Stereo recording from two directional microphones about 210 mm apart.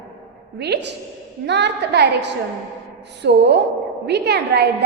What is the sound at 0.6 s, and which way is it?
A woman's voice, 50° right (ahead or behind).